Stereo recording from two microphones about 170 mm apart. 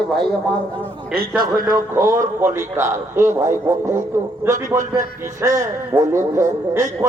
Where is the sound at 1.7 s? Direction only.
15° right (ahead or behind).